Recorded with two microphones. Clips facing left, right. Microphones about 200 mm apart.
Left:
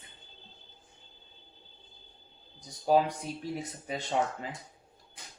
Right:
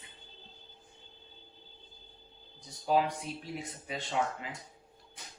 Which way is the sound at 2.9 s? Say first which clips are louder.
Left 3 dB; 40° left (ahead or behind).